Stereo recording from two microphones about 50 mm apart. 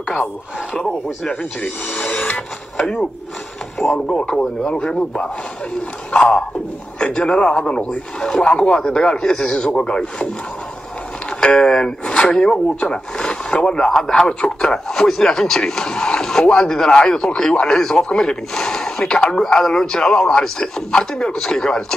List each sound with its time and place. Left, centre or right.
0.7 s speech: centre
1.6 s speech: left
2.8 s speech: centre
11.4 s speech: centre